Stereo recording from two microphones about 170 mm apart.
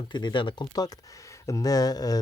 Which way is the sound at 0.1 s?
25° left (ahead or behind).